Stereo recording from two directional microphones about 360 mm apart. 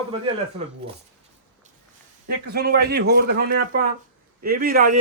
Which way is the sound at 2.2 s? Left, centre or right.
Right.